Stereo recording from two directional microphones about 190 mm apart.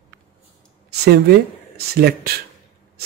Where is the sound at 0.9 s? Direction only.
60° right (ahead or behind).